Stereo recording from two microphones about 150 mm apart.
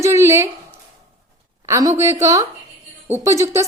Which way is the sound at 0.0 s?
20° right (ahead or behind).